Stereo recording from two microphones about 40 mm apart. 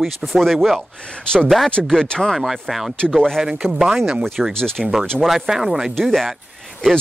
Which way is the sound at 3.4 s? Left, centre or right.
Centre.